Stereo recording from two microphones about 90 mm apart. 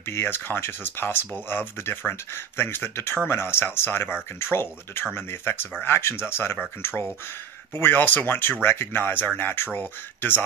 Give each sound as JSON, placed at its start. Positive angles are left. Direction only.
{"t": 0.0, "sound": "speech", "side_deg": 25}